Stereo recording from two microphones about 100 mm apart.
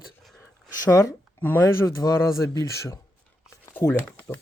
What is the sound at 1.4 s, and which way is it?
Speech, 20° left (ahead or behind).